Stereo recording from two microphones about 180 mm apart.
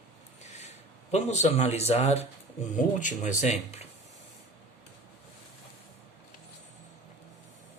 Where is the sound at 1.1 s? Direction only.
40° left (ahead or behind).